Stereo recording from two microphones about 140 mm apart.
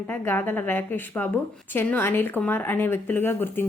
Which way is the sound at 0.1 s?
15° left (ahead or behind).